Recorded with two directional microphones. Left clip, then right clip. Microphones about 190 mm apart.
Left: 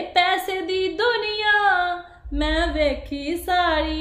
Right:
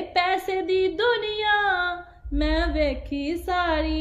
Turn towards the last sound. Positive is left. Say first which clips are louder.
# left 3 dB
turn(degrees=20)  # may be behind; listen again after turning